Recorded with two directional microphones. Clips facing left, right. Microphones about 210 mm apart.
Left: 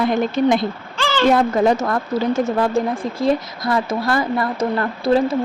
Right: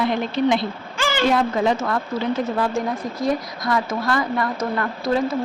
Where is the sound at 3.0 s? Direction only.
30° left (ahead or behind).